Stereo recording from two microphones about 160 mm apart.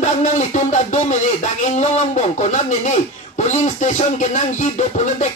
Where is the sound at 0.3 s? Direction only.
50° left (ahead or behind).